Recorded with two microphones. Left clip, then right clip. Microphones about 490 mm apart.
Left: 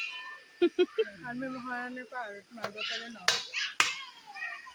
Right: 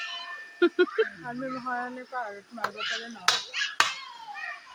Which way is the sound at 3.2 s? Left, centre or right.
Centre.